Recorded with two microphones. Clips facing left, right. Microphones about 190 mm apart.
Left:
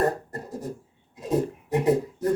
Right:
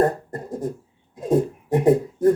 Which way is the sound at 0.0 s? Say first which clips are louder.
Right 4 dB; 50° right (ahead or behind).